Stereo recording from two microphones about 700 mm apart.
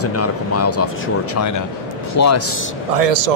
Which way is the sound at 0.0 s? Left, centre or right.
Centre.